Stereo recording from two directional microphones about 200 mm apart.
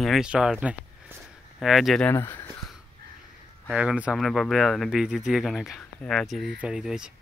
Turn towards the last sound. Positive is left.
turn(degrees=-5)  # may be behind; listen again after turning